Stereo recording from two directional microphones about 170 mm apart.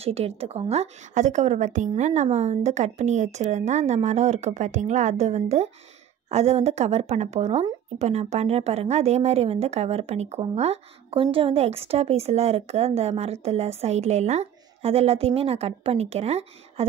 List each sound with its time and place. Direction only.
0.0 s a woman's voice: 35° right (ahead or behind)